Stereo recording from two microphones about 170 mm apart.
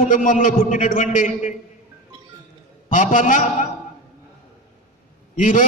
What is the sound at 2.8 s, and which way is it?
Speech, 45° left (ahead or behind).